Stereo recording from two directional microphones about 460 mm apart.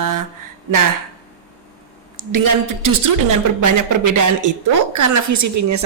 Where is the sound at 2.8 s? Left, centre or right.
Right.